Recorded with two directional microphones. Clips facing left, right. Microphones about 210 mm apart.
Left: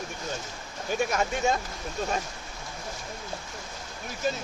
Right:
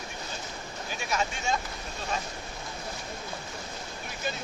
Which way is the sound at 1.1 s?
50° left (ahead or behind).